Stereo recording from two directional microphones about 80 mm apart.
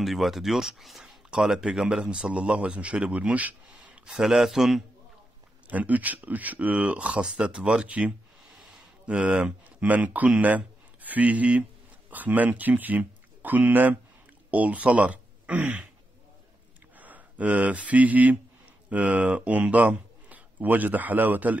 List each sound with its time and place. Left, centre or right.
0.0 s speech: centre
5.7 s speech: right
16.9 s speech: right